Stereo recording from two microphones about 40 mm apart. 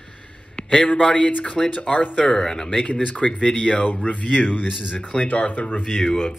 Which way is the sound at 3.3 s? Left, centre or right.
Left.